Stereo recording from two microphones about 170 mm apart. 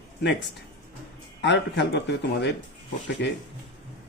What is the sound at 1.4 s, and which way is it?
Speech, 90° left.